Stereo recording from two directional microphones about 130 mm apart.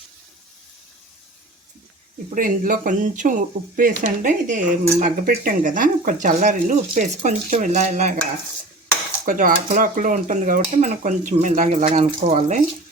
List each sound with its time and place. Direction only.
2.3 s speech: 90° right; by 8.2 s 65° right (ahead or behind)
9.2 s speech: 90° right
11.9 s speech: 65° right (ahead or behind)